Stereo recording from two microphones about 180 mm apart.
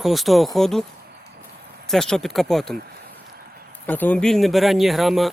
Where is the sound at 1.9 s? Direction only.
Centre (ahead or behind).